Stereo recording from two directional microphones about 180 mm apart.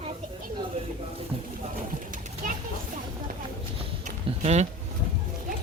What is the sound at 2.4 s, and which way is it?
Children playing, 50° right (ahead or behind).